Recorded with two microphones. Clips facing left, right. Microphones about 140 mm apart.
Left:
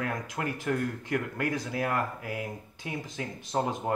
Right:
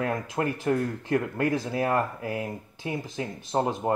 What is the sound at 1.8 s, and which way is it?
Speech, 35° right (ahead or behind).